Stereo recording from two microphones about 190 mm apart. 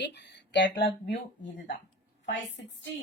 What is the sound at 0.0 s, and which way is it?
Speech, 65° left (ahead or behind).